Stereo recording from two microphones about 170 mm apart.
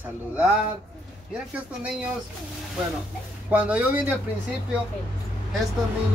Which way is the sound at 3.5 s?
10° right (ahead or behind).